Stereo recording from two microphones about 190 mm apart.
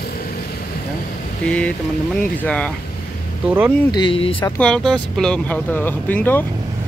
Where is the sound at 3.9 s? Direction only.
25° left (ahead or behind).